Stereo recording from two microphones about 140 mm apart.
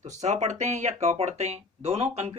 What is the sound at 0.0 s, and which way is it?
Speech, 55° right (ahead or behind).